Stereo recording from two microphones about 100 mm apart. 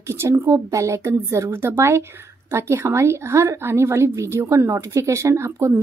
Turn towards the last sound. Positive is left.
turn(degrees=-30)  # may be behind; listen again after turning